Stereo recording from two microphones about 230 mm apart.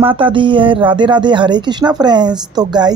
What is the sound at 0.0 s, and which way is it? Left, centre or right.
A woman's voice, right.